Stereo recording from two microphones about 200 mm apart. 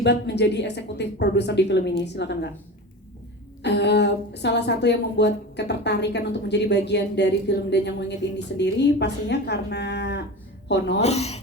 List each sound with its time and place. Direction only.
0.0 s a woman's voice: 60° left (ahead or behind)
3.6 s a woman's voice: 60° left (ahead or behind)
11.0 s a woman's voice: 30° left (ahead or behind)